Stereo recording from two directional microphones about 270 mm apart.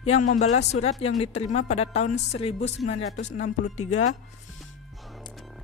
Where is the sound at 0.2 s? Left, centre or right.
Left.